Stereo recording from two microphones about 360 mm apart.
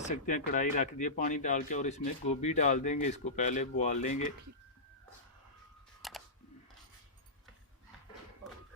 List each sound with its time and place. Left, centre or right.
0.0 s speech: left
6.0 s camera: centre